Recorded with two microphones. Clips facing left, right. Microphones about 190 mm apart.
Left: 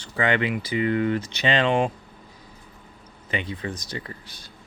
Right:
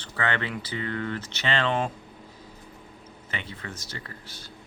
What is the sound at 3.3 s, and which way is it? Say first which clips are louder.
Speech: left 8 dB; 15° left (ahead or behind).